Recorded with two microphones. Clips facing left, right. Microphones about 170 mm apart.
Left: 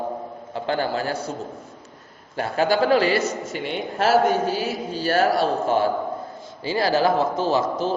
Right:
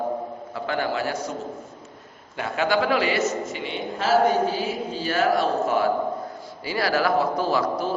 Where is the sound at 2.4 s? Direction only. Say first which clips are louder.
Left 3 dB; 35° left (ahead or behind).